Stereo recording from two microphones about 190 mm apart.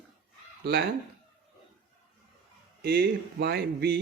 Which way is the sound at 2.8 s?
55° right (ahead or behind).